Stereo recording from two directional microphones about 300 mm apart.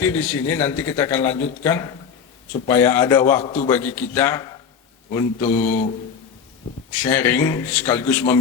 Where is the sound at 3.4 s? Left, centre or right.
Left.